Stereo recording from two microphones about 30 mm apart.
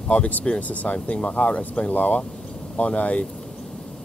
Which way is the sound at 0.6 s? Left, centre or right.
Left.